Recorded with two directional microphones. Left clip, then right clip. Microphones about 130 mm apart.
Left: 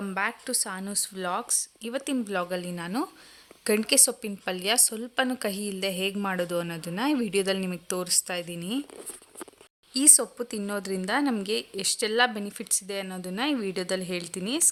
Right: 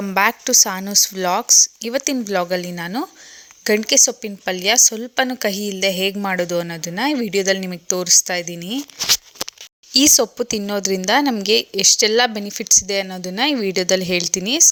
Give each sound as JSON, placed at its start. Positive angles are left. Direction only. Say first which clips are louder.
{"t": 0.1, "sound": "speech", "louder": "right 14 dB", "side_deg": -45}
{"t": 9.9, "sound": "speech", "louder": "right 10 dB", "side_deg": -40}